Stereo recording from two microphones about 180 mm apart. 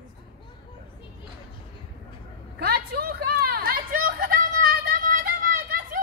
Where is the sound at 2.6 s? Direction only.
55° right (ahead or behind).